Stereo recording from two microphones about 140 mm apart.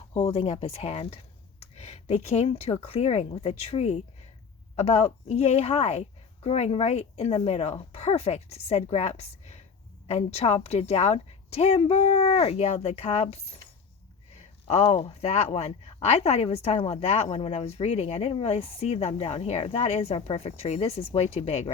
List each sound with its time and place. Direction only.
0.1 s speech: 40° left (ahead or behind)
14.7 s speech: 50° left (ahead or behind)